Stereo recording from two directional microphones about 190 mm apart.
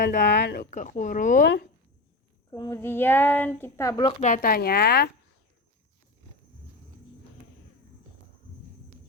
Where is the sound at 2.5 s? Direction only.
15° left (ahead or behind).